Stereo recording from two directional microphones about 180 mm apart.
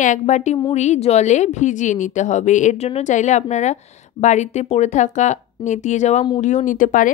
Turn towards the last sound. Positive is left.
turn(degrees=45)  # may be behind; listen again after turning